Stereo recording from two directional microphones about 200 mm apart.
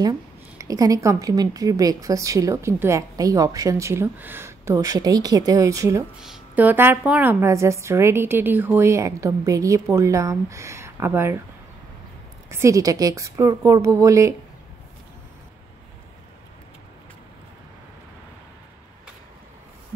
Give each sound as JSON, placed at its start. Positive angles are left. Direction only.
{"t": 0.6, "sound": "a woman's voice", "side_deg": -15}
{"t": 12.4, "sound": "a woman's voice", "side_deg": -15}